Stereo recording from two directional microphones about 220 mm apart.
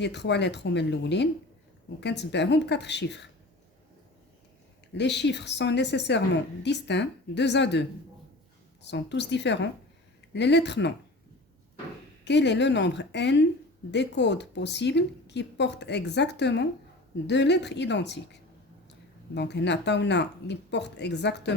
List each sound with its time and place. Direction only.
0.0 s a woman's voice: 50° left (ahead or behind)
4.9 s a woman's voice: 50° left (ahead or behind)
12.2 s a woman's voice: 50° left (ahead or behind)